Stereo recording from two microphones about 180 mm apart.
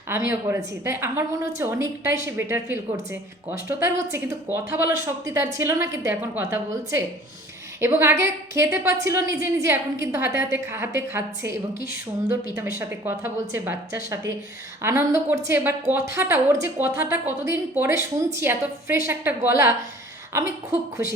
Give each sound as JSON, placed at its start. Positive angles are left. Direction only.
{"t": 0.3, "sound": "a woman's voice", "side_deg": -15}
{"t": 12.8, "sound": "a woman's voice", "side_deg": -10}